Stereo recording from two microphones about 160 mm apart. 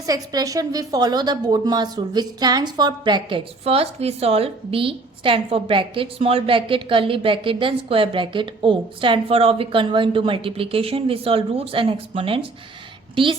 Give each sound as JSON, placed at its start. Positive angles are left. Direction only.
{"t": 0.0, "sound": "a woman's voice", "side_deg": -25}